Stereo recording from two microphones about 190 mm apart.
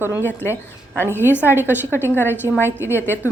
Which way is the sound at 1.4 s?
10° right (ahead or behind).